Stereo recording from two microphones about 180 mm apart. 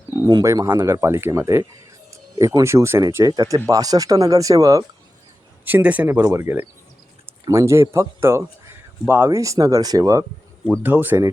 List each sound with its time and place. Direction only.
0.2 s speech: 20° right (ahead or behind)
5.6 s speech: 10° right (ahead or behind)